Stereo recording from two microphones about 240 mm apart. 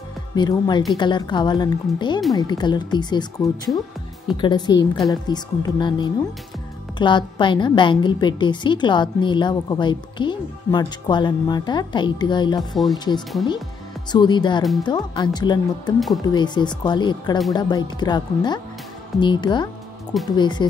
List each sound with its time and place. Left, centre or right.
0.4 s a woman's voice: centre